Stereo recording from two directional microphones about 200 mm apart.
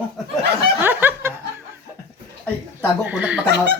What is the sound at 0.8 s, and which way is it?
Snicker, 10° right (ahead or behind).